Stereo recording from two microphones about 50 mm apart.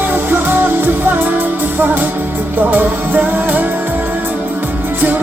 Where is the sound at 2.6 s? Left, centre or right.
Right.